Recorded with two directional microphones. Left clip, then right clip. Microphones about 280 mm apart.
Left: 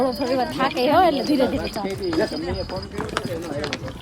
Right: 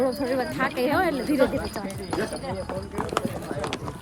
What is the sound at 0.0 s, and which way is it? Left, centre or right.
Speech, centre.